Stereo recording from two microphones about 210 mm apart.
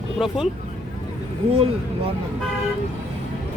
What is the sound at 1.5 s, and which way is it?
Speech, 25° right (ahead or behind).